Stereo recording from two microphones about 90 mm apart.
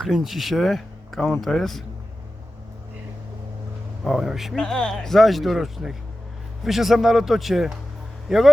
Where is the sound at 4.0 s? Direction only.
Centre (ahead or behind).